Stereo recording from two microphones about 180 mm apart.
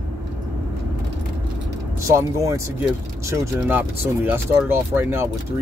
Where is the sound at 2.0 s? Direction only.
15° right (ahead or behind).